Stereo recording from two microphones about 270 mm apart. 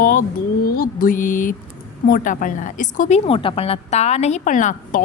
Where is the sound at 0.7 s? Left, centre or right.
Left.